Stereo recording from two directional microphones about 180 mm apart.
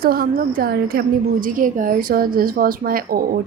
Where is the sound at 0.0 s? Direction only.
55° right (ahead or behind).